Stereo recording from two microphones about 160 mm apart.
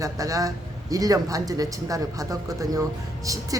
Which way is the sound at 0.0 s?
20° right (ahead or behind).